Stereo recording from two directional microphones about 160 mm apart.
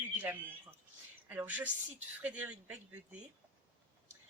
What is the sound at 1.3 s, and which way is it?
Speech, 10° right (ahead or behind).